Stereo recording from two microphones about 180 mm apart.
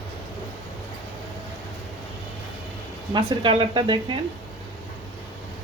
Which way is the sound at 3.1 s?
25° right (ahead or behind).